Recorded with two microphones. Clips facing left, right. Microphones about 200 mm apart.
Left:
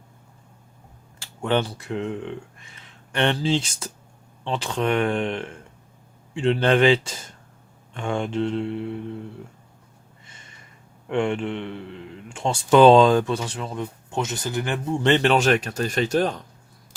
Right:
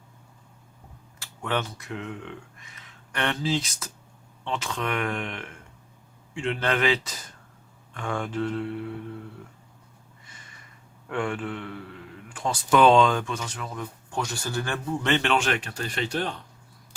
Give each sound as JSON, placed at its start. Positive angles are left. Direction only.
{"t": 1.2, "sound": "speech", "side_deg": 30}
{"t": 10.2, "sound": "a sound", "side_deg": 25}
{"t": 11.1, "sound": "speech", "side_deg": 25}